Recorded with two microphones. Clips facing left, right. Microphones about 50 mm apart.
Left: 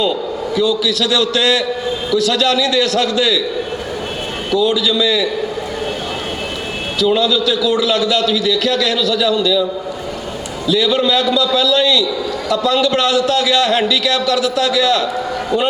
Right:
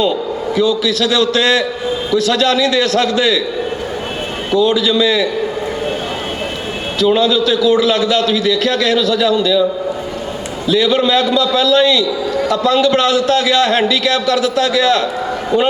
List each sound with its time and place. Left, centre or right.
0.5 s a man's voice: right
4.5 s a man's voice: right
7.0 s a man's voice: right
10.7 s a man's voice: right